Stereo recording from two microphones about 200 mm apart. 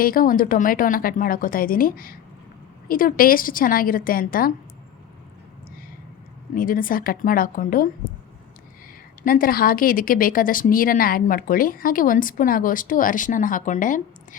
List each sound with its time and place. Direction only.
0.0 s speech: 45° left (ahead or behind)
6.5 s speech: 45° left (ahead or behind)
9.2 s speech: 45° left (ahead or behind)